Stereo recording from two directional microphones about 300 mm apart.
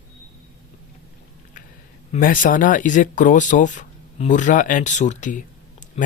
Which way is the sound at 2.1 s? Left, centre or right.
Left.